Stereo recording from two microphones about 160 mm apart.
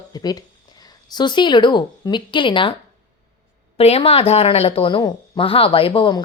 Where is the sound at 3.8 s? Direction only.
40° left (ahead or behind).